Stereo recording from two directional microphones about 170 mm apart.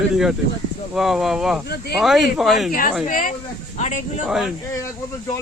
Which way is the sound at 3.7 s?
40° left (ahead or behind).